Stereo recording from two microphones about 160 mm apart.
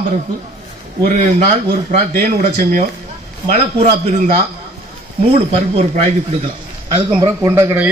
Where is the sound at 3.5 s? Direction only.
45° right (ahead or behind).